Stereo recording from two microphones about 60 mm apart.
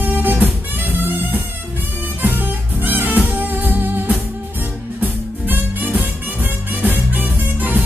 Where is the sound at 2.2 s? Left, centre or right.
Right.